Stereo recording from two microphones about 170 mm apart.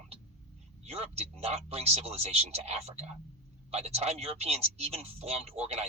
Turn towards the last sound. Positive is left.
turn(degrees=-35)  # may be behind; listen again after turning